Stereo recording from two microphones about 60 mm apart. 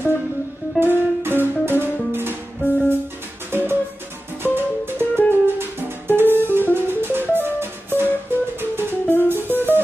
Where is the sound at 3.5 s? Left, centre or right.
Right.